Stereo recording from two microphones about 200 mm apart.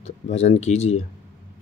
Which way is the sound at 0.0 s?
30° left (ahead or behind).